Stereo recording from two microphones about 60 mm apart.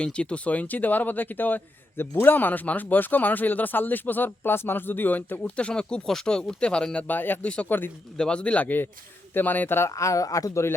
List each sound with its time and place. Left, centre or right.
0.0 s speech: centre; by 5.4 s left
5.4 s speech: centre
7.1 s speech: left
7.4 s speech: centre; by 9.9 s left
9.9 s speech: left
10.5 s speech: left